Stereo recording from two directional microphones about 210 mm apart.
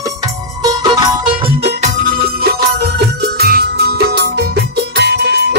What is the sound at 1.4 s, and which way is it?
Music, 30° right (ahead or behind).